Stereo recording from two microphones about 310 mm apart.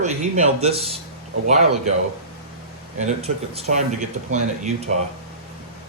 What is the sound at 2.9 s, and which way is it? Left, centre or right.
Speech, right.